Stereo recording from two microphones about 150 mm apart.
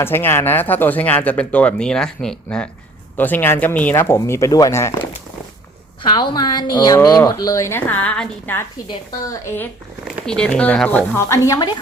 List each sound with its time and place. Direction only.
0.0 s speech: 15° left (ahead or behind)
6.0 s a woman's voice: 30° left (ahead or behind); by 8.6 s 10° left (ahead or behind)
10.1 s speech: 5° left (ahead or behind); by 11.7 s 20° left (ahead or behind)